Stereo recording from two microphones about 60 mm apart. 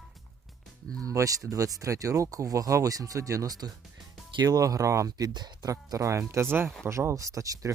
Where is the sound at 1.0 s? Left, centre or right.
Right.